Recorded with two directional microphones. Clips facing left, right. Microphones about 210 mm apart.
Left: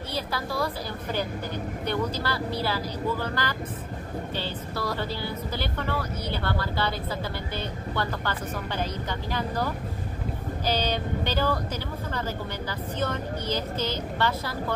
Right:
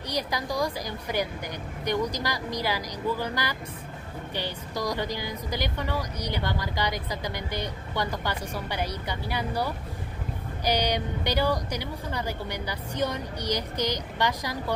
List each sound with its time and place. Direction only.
0.1 s a woman's voice: 15° right (ahead or behind)
1.9 s speech: 15° right (ahead or behind)